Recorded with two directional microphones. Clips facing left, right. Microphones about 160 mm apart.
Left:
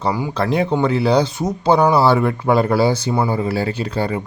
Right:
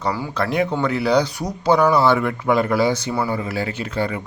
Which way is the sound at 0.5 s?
30° left (ahead or behind).